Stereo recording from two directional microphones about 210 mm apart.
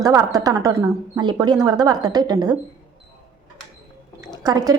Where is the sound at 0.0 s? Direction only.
15° right (ahead or behind).